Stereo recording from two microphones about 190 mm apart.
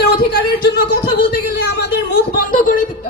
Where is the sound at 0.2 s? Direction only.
55° left (ahead or behind).